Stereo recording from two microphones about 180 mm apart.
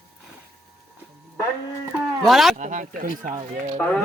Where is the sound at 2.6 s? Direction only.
45° right (ahead or behind).